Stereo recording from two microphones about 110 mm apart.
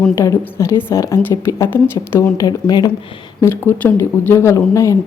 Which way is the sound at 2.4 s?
35° left (ahead or behind).